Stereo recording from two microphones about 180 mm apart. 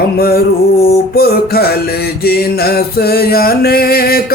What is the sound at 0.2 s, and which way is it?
Music, 55° left (ahead or behind).